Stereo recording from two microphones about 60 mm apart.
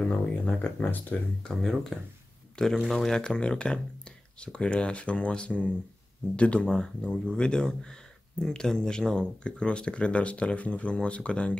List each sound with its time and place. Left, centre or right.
0.1 s speech: left
1.4 s speech: centre
3.2 s speech: centre